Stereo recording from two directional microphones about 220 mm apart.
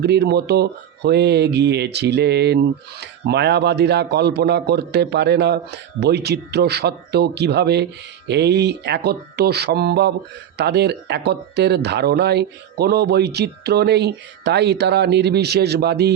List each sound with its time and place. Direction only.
0.0 s speech: 50° right (ahead or behind)